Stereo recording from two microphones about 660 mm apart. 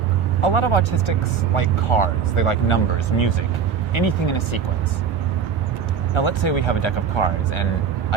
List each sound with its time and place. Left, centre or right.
0.4 s speech: left
6.1 s speech: left